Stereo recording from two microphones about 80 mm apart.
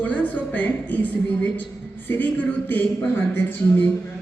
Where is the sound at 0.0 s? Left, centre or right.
Centre.